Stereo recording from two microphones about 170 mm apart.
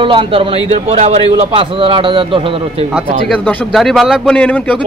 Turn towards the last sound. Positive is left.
turn(degrees=5)  # may be behind; listen again after turning